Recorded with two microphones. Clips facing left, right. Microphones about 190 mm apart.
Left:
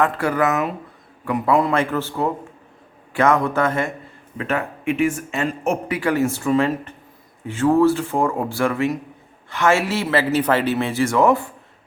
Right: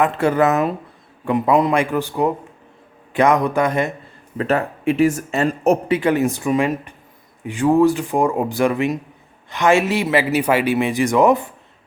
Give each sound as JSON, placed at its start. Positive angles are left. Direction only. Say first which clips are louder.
{"t": 0.0, "sound": "speech", "louder": "right 3 dB", "side_deg": -25}
{"t": 4.4, "sound": "speech", "louder": "right 4 dB", "side_deg": -35}
{"t": 5.9, "sound": "speech", "louder": "right 3 dB", "side_deg": -20}